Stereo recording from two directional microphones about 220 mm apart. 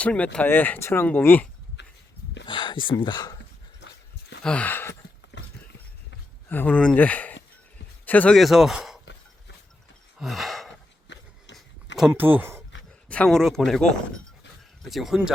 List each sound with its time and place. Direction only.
0.0 s speech: 5° left (ahead or behind)
1.8 s a sound: 55° left (ahead or behind)
2.5 s speech: 20° left (ahead or behind)
3.8 s dog: 50° left (ahead or behind)
4.4 s speech: 5° left (ahead or behind)
5.3 s a sound: 50° left (ahead or behind)
6.5 s speech: 10° left (ahead or behind)
10.2 s gasp: centre (ahead or behind)
11.1 s a sound: 50° left (ahead or behind)
11.9 s speech: 5° right (ahead or behind)
13.1 s speech: 5° left (ahead or behind)
14.8 s speech: centre (ahead or behind)